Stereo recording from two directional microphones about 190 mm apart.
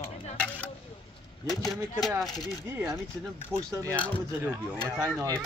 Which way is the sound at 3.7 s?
15° right (ahead or behind).